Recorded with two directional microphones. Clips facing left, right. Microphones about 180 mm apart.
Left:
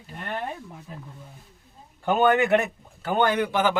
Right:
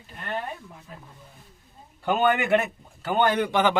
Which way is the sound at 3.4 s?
5° left (ahead or behind).